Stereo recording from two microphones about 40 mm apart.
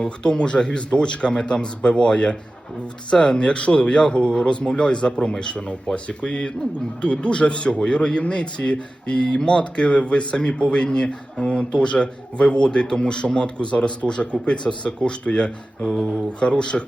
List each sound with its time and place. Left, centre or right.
0.0 s speech: left
5.6 s speech: left
15.4 s speech: centre